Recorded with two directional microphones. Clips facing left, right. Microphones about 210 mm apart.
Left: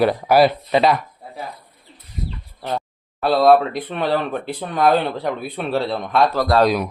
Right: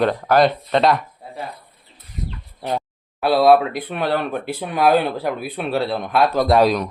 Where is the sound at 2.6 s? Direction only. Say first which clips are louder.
Right 1 dB; 15° right (ahead or behind).